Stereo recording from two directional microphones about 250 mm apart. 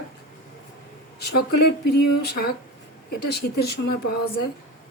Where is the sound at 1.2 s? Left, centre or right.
Left.